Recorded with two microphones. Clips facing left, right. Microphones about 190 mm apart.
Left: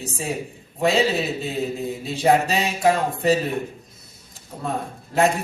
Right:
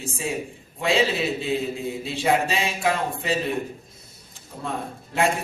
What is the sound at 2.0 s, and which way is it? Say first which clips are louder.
A man's voice: left 4 dB; 40° left (ahead or behind).